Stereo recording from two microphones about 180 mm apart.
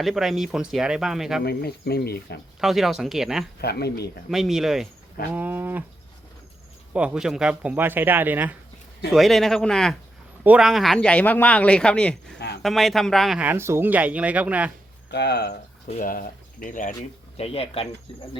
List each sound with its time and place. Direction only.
0.0 s speech: centre (ahead or behind)
1.5 s speech: 60° left (ahead or behind)
2.6 s speech: centre (ahead or behind)
3.6 s speech: 65° left (ahead or behind)
4.3 s speech: centre (ahead or behind)
6.9 s speech: 5° right (ahead or behind)
9.1 s speech: centre (ahead or behind)
15.1 s speech: 65° left (ahead or behind)
15.9 s speech: 50° left (ahead or behind)
17.3 s speech: 35° left (ahead or behind)